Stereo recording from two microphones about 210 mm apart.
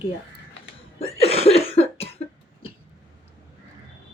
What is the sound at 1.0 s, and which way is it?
Cough, 30° left (ahead or behind).